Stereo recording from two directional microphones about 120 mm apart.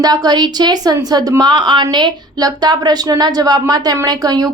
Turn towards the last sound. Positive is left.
turn(degrees=-30)  # may be behind; listen again after turning